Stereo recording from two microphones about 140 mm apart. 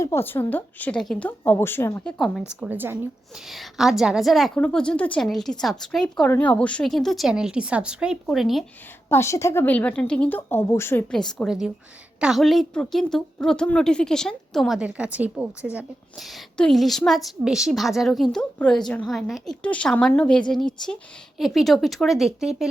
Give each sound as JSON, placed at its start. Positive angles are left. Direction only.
{"t": 0.0, "sound": "a woman's voice", "side_deg": 15}
{"t": 2.1, "sound": "a woman's voice", "side_deg": 0}
{"t": 2.5, "sound": "a woman's voice", "side_deg": -10}
{"t": 3.3, "sound": "a woman's voice", "side_deg": 0}
{"t": 9.0, "sound": "a woman's voice", "side_deg": 20}
{"t": 11.1, "sound": "a woman's voice", "side_deg": 5}